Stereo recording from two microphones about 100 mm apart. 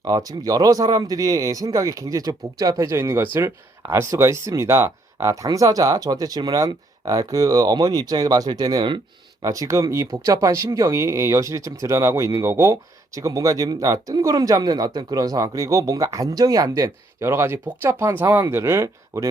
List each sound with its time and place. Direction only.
0.0 s speech: 40° right (ahead or behind)
9.4 s speech: 35° right (ahead or behind)